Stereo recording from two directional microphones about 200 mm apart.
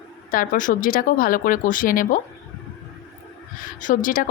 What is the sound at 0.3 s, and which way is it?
Speech, 40° left (ahead or behind).